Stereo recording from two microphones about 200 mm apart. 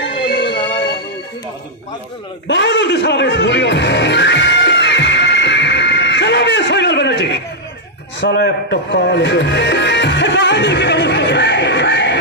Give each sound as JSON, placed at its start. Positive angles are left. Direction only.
{"t": 0.3, "sound": "music", "side_deg": 55}
{"t": 2.4, "sound": "music", "side_deg": 60}
{"t": 8.2, "sound": "speech", "side_deg": 60}